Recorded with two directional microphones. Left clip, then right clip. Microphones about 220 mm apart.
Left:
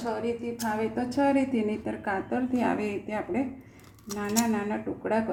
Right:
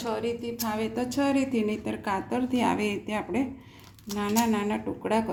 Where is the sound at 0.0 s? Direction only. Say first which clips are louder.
Right 1 dB; 45° right (ahead or behind).